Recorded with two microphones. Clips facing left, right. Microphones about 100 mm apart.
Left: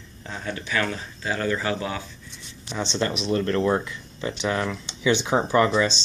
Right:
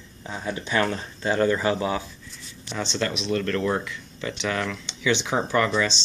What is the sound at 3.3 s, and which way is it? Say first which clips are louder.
Speech: left 3 dB; 25° left (ahead or behind).